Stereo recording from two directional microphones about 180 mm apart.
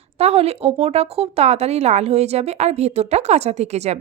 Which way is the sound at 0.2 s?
35° right (ahead or behind).